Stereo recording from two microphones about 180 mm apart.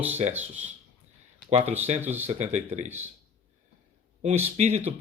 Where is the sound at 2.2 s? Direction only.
40° right (ahead or behind).